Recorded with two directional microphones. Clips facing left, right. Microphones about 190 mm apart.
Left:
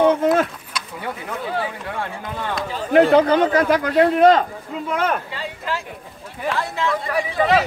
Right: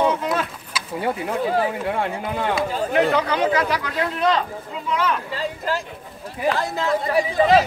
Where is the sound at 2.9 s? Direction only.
45° left (ahead or behind).